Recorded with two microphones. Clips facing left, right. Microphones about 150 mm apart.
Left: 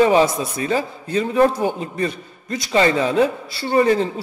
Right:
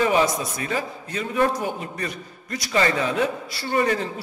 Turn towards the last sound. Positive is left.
turn(degrees=30)  # may be behind; listen again after turning